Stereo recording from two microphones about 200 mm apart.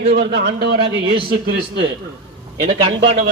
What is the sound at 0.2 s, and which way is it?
Speech, 60° right (ahead or behind).